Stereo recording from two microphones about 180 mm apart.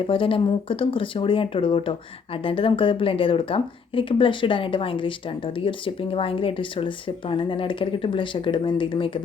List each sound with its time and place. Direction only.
0.1 s speech: 30° left (ahead or behind)